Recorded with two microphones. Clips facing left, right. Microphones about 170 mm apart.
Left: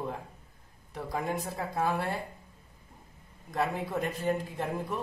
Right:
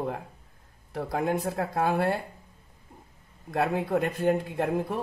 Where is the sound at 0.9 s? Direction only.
65° right (ahead or behind).